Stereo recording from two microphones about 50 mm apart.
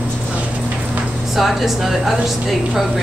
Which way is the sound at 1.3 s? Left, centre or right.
Centre.